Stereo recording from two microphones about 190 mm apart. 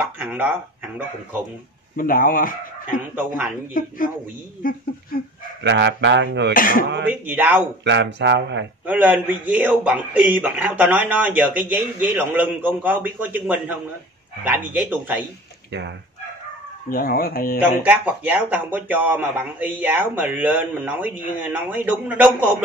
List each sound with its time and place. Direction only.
0.2 s a man's voice: 10° right (ahead or behind)
2.0 s speech: 45° left (ahead or behind)
3.2 s a man's voice: 10° right (ahead or behind)
3.8 s speech: 45° left (ahead or behind)
5.6 s speech: 65° right (ahead or behind)
6.5 s speech: 45° left (ahead or behind)
7.2 s a man's voice: 10° right (ahead or behind)
7.8 s speech: 65° right (ahead or behind)
8.8 s a man's voice: 10° right (ahead or behind)
16.9 s speech: 50° left (ahead or behind)
17.8 s a man's voice: 10° right (ahead or behind)